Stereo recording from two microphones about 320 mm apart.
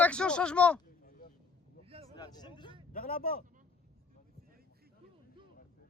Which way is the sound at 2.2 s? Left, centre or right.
Centre.